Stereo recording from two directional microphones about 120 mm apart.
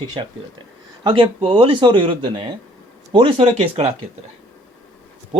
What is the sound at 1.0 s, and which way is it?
Speech, 40° right (ahead or behind).